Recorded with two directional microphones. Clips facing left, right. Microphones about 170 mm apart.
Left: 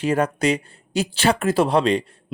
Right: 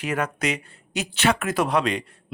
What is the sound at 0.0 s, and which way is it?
Speech, 30° left (ahead or behind).